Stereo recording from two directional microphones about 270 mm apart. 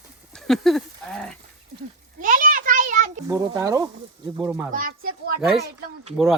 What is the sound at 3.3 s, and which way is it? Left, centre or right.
Speech, centre.